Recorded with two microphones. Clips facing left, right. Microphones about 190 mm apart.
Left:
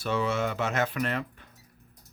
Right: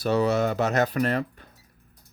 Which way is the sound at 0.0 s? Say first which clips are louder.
Right 6 dB; 40° right (ahead or behind).